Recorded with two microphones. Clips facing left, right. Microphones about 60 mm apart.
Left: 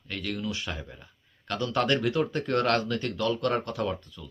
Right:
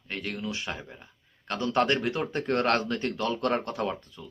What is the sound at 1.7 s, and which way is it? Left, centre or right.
Speech, right.